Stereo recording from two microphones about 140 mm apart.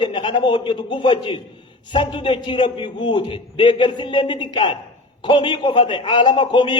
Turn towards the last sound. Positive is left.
turn(degrees=35)  # may be behind; listen again after turning